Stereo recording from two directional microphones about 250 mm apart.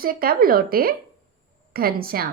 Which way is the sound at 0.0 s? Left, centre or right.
Right.